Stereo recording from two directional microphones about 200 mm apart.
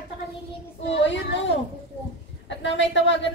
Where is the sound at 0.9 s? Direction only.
65° left (ahead or behind).